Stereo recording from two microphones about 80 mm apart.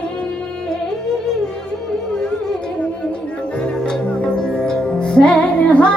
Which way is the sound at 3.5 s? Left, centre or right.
Centre.